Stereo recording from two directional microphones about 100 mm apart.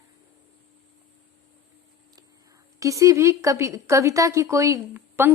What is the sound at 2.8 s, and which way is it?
A woman's voice, 30° right (ahead or behind).